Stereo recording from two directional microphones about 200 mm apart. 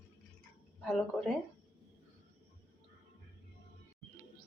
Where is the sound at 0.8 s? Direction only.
5° left (ahead or behind).